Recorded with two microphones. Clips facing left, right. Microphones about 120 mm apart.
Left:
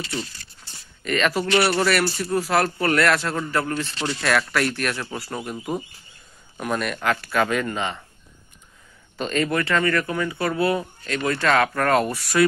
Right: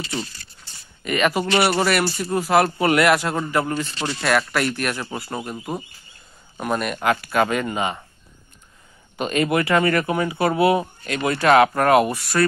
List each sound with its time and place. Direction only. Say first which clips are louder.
1.0 s speech: right 2 dB; 10° right (ahead or behind)
9.4 s speech: right 3 dB; 20° right (ahead or behind)